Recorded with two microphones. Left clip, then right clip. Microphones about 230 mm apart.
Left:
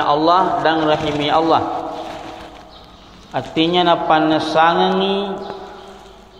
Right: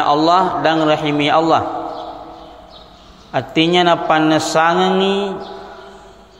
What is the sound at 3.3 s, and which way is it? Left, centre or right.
A man's voice, right.